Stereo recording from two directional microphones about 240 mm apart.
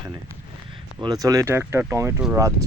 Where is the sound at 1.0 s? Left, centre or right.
Centre.